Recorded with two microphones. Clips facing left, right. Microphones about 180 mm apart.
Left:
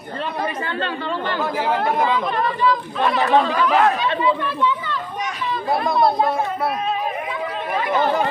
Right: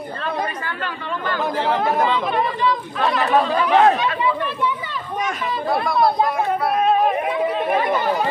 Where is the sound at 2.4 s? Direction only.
25° right (ahead or behind).